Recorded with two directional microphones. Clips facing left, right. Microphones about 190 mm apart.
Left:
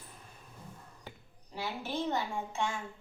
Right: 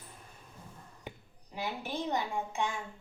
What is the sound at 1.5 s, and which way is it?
A child's voice, 15° right (ahead or behind).